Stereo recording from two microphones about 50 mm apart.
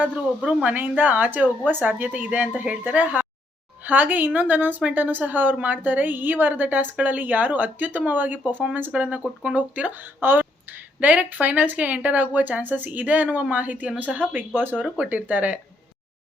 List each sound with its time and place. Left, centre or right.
0.0 s speech: right
8.9 s speech: right
10.2 s a sound: right
11.0 s speech: right